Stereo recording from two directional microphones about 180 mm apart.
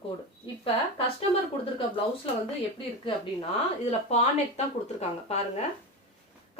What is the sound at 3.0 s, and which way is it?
A woman's voice, 30° left (ahead or behind).